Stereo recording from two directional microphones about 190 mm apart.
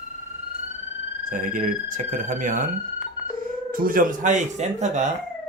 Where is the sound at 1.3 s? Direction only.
45° right (ahead or behind).